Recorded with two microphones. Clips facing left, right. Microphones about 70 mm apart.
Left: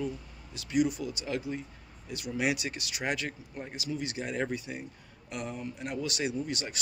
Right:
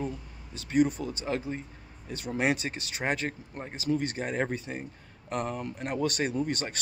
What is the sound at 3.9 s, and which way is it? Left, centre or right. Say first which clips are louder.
A man's voice: right 6 dB; right.